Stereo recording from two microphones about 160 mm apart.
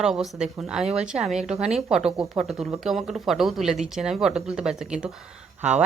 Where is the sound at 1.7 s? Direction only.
5° right (ahead or behind).